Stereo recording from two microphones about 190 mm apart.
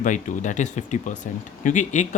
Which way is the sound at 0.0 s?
40° left (ahead or behind).